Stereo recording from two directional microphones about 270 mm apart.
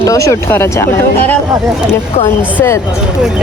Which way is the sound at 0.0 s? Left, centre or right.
Centre.